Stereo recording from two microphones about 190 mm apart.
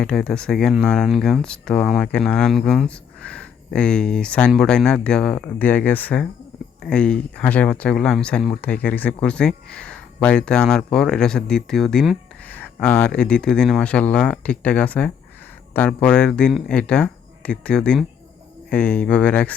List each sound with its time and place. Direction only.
0.0 s speech: 5° left (ahead or behind)